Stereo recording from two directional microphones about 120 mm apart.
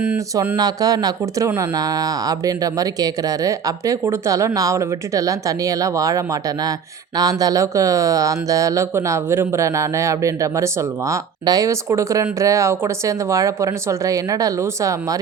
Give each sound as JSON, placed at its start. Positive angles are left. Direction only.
{"t": 0.5, "sound": "speech", "side_deg": -30}